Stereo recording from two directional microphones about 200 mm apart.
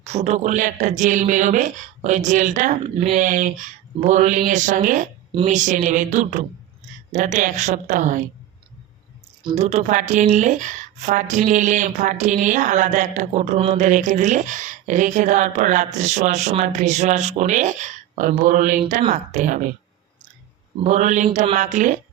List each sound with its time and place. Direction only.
0.0 s a woman's voice: 35° right (ahead or behind)
5.3 s speech: 25° right (ahead or behind)
5.5 s a woman's voice: 40° right (ahead or behind)
9.4 s speech: 20° right (ahead or behind)
9.6 s a woman's voice: 35° right (ahead or behind)
20.8 s a woman's voice: 35° right (ahead or behind)